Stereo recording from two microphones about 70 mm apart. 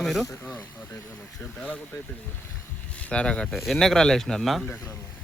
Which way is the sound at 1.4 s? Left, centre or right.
Left.